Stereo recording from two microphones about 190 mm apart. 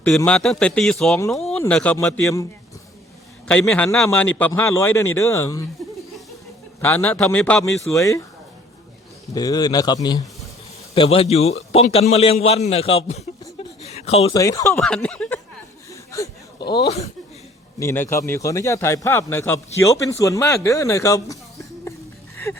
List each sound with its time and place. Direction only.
0.3 s a man's voice: 5° left (ahead or behind)
3.5 s a man's voice: 5° left (ahead or behind)
6.8 s a man's voice: 10° left (ahead or behind)
9.3 s a man's voice: 20° left (ahead or behind)
13.8 s a sound: 35° left (ahead or behind)
14.3 s a man's voice: 15° left (ahead or behind)
14.8 s speech: 5° left (ahead or behind)
15.9 s a sound: 15° left (ahead or behind)
17.7 s a man's voice: 15° left (ahead or behind)